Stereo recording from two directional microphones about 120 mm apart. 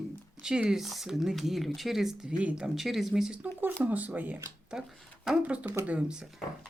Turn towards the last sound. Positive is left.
turn(degrees=-10)  # may be behind; listen again after turning